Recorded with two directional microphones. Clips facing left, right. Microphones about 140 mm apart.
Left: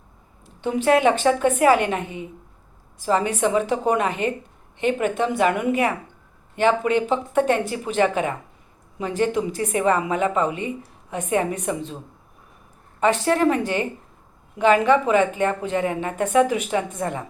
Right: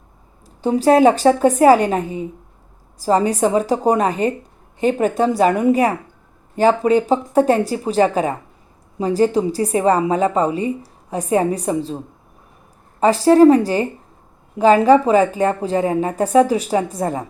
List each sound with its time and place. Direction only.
0.4 s a woman's voice: 35° right (ahead or behind)
13.0 s a woman's voice: 35° right (ahead or behind)